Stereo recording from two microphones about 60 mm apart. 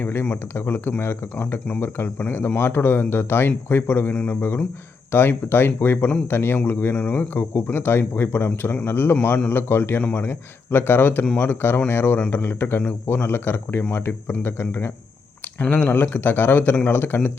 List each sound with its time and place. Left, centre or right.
0.0 s speech: left
15.7 s speech: left